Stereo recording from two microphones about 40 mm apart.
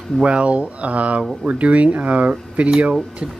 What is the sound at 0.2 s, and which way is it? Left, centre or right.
Speech, right.